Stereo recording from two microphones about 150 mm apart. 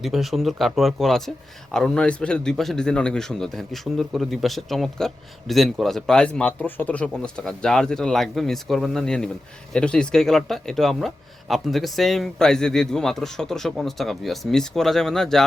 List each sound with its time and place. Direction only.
0.0 s a man's voice: centre (ahead or behind)